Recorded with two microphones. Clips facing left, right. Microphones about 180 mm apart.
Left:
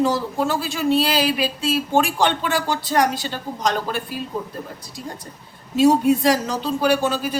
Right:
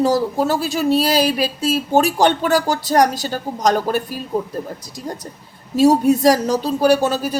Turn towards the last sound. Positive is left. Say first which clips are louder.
# right 4 dB
turn(degrees=-40)  # may be behind; listen again after turning